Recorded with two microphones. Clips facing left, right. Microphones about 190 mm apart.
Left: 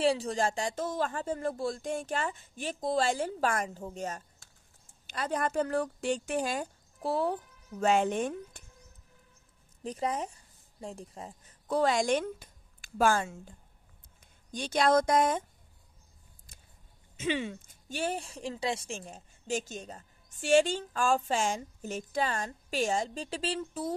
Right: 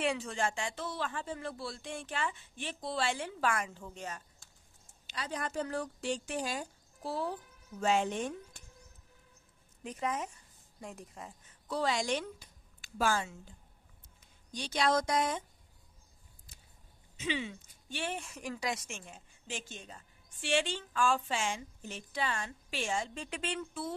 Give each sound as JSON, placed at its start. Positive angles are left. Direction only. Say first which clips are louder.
{"t": 0.0, "sound": "a woman's voice", "louder": "left 6 dB", "side_deg": 35}
{"t": 9.8, "sound": "speech", "louder": "left 3 dB", "side_deg": 35}
{"t": 11.6, "sound": "a woman's voice", "louder": "left 6 dB", "side_deg": 50}
{"t": 16.5, "sound": "a sound", "louder": "left 2 dB", "side_deg": 55}
{"t": 17.2, "sound": "speech", "louder": "left 5 dB", "side_deg": 50}